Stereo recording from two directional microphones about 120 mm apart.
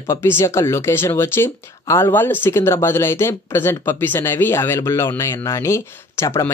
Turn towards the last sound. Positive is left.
turn(degrees=20)  # may be behind; listen again after turning